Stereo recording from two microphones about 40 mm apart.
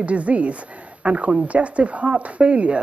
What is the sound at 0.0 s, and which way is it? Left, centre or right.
Speech, right.